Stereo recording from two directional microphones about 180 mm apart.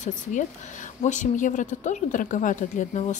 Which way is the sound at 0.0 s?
45° left (ahead or behind).